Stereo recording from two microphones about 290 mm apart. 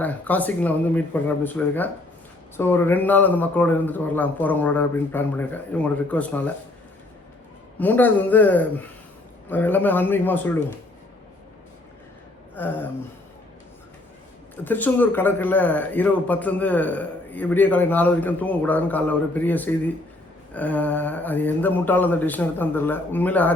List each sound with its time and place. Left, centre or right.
0.0 s a man's voice: centre
7.8 s a man's voice: centre
12.5 s speech: centre
14.5 s a man's voice: centre